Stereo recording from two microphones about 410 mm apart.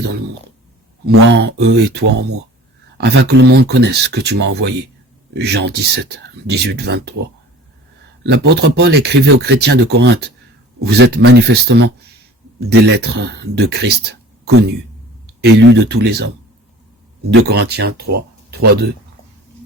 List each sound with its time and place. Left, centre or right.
0.0 s speech: right
8.2 s speech: right
17.3 s speech: right